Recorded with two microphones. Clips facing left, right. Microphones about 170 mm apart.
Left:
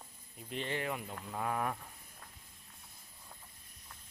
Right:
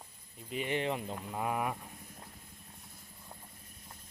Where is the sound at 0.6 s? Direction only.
20° right (ahead or behind).